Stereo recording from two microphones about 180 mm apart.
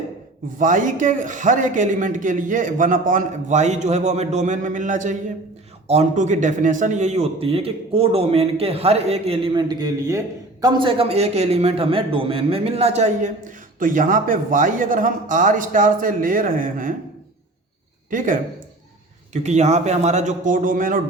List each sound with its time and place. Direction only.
0.4 s a man's voice: 45° right (ahead or behind)
13.7 s a man's voice: 50° right (ahead or behind)
18.1 s a man's voice: 45° right (ahead or behind)
19.3 s a man's voice: 40° right (ahead or behind)